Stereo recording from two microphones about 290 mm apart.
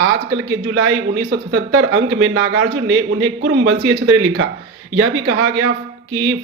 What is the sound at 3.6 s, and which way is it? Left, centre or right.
Speech, right.